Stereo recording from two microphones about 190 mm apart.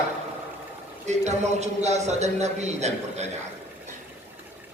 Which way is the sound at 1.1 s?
35° right (ahead or behind).